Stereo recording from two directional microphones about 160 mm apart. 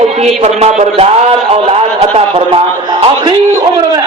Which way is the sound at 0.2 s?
40° right (ahead or behind).